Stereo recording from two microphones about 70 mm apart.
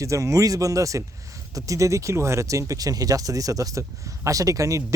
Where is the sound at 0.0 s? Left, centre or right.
Right.